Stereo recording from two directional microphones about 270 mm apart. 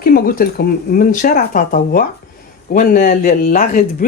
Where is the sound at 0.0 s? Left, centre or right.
Left.